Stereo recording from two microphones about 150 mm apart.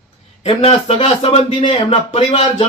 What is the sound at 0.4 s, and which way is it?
A man's voice, 40° left (ahead or behind).